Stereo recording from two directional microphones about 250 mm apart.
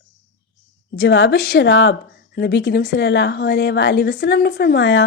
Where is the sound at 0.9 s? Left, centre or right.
Left.